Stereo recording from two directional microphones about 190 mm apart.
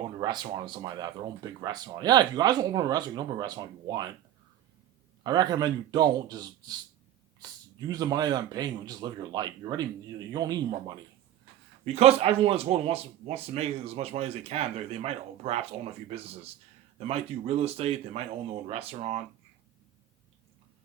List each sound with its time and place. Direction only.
0.0 s speech: 25° right (ahead or behind)
5.2 s speech: 20° right (ahead or behind)
7.4 s a sound: 20° right (ahead or behind)
7.9 s speech: 20° right (ahead or behind)
11.9 s speech: 30° right (ahead or behind)